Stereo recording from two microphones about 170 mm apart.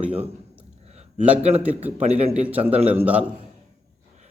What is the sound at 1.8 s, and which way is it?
A man's voice, 10° right (ahead or behind).